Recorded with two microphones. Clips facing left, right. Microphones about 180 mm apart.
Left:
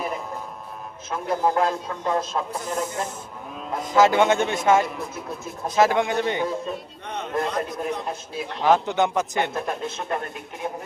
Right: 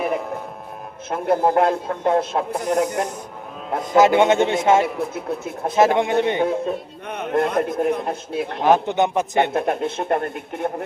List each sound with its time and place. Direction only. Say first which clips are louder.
1.1 s a man's voice: right 5 dB; 55° right (ahead or behind)
3.9 s a man's voice: right 3 dB; 20° right (ahead or behind)
5.1 s a man's voice: right 6 dB; 60° right (ahead or behind)
5.7 s a man's voice: right 3 dB; 20° right (ahead or behind)
6.4 s a man's voice: right 6 dB; 60° right (ahead or behind)
8.6 s a man's voice: right 2 dB; 20° right (ahead or behind)
9.5 s a man's voice: right 7 dB; 60° right (ahead or behind)